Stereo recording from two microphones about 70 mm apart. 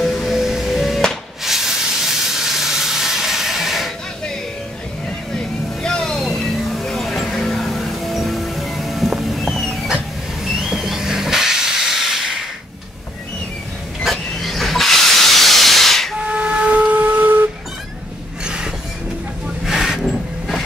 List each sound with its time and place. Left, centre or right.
0.0 s spray: centre
5.3 s vehicle: centre
10.5 s steam: centre
14.0 s hiss: centre
16.2 s steam whistle: centre
18.4 s a sound: centre